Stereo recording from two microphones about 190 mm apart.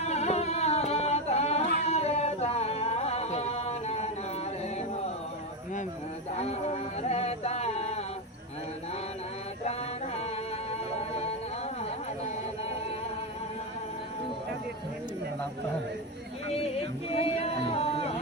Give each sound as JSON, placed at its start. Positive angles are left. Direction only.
{"t": 0.0, "sound": "a sound", "side_deg": 35}
{"t": 1.8, "sound": "music", "side_deg": 35}
{"t": 6.3, "sound": "music", "side_deg": 35}
{"t": 11.1, "sound": "music", "side_deg": 35}
{"t": 17.2, "sound": "music", "side_deg": 30}